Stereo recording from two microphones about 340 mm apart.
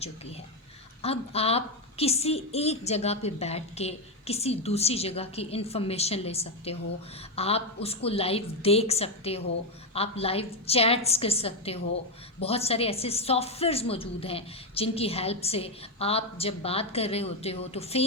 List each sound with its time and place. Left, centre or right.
0.0 s a woman's voice: centre